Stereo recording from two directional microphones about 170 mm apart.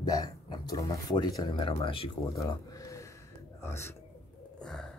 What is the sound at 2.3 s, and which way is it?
Speech, 20° left (ahead or behind).